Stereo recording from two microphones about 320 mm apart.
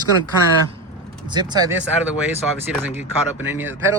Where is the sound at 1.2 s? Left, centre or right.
Centre.